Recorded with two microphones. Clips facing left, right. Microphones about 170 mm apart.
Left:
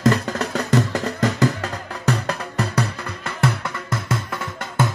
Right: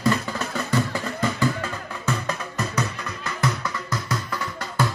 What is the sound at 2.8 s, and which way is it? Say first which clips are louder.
Music: left 3 dB; 60° left (ahead or behind).